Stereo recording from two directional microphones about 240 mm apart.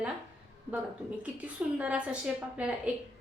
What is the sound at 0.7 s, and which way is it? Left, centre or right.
A woman's voice, centre.